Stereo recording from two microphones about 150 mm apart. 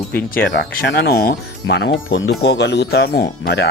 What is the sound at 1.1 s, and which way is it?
Speech, 90° left.